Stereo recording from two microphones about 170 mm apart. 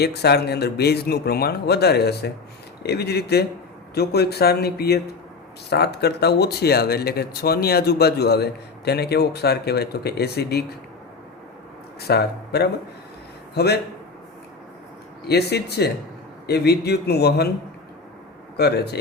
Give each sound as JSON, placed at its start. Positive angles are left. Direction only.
{"t": 0.0, "sound": "speech", "side_deg": 70}
{"t": 11.9, "sound": "speech", "side_deg": 70}
{"t": 15.3, "sound": "speech", "side_deg": 75}
{"t": 18.5, "sound": "speech", "side_deg": 70}